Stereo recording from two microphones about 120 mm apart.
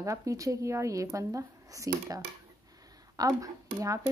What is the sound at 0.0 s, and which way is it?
Speech, 25° right (ahead or behind).